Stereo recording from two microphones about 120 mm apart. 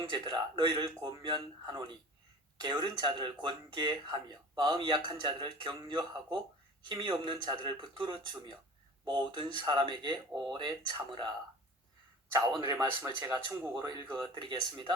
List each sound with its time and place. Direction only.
0.1 s speech: 35° right (ahead or behind)
13.0 s speech: 20° right (ahead or behind)
14.1 s speech: 40° right (ahead or behind)